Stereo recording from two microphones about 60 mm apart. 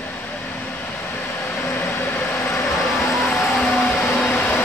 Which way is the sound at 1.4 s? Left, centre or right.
Left.